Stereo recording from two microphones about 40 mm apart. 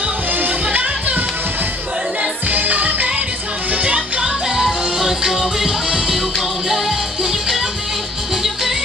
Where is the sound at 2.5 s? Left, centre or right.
Right.